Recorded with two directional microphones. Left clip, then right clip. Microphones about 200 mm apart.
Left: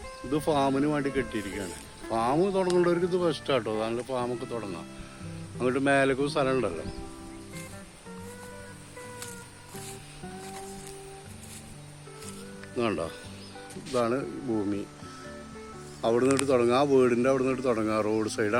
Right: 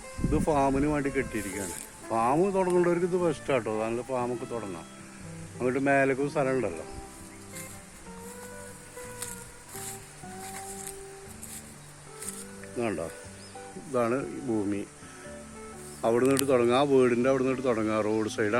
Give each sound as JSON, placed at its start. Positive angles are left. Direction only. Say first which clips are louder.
{"t": 0.3, "sound": "speech", "louder": "even", "side_deg": 10}
{"t": 5.5, "sound": "speech", "louder": "even", "side_deg": 10}
{"t": 12.7, "sound": "speech", "louder": "left 2 dB", "side_deg": 25}
{"t": 13.9, "sound": "speech", "louder": "even", "side_deg": 5}
{"t": 16.0, "sound": "speech", "louder": "even", "side_deg": 15}